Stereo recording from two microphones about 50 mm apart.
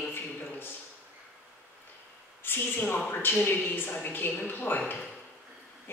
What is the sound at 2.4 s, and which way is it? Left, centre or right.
A man's voice, left.